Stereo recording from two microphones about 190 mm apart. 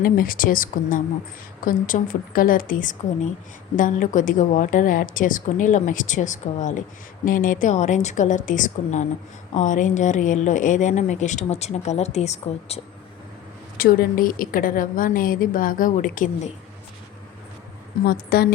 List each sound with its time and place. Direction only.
0.0 s a woman's voice: 50° left (ahead or behind)
13.7 s a woman's voice: 50° left (ahead or behind)
18.0 s a woman's voice: 55° left (ahead or behind)